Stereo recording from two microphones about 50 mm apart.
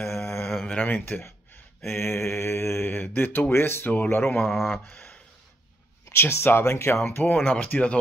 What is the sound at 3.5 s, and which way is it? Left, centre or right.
Speech, left.